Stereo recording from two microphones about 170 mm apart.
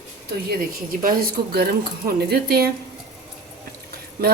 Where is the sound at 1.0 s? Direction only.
60° right (ahead or behind).